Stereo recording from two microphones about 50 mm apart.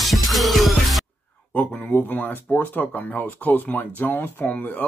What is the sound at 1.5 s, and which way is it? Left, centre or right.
Speech, left.